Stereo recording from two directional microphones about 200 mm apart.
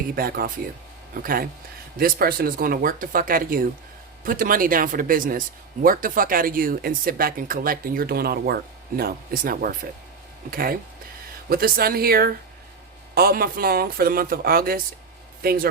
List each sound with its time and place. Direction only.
0.1 s a man's voice: 50° right (ahead or behind)